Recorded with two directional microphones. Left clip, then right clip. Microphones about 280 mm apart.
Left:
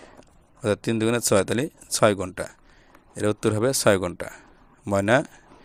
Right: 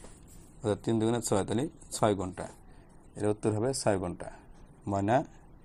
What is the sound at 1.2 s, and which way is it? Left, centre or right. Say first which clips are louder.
Speech: left 9 dB; left.